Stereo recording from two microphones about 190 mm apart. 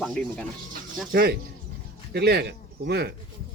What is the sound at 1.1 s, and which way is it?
Speech, 55° right (ahead or behind).